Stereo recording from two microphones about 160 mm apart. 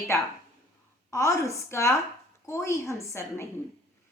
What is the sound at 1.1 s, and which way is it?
A woman's voice, 20° left (ahead or behind).